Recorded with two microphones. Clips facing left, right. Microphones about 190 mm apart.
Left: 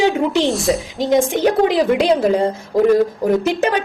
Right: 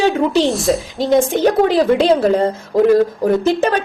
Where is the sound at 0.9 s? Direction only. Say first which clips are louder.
Right 2 dB; 15° left (ahead or behind).